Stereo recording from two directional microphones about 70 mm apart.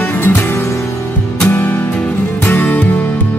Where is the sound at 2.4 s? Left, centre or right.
Left.